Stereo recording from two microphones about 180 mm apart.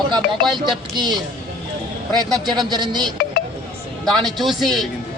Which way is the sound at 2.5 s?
25° right (ahead or behind).